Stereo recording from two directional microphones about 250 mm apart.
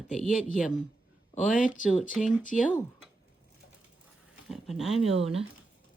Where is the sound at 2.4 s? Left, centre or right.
Left.